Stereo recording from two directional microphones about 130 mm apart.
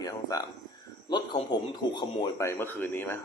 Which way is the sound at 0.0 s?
25° left (ahead or behind).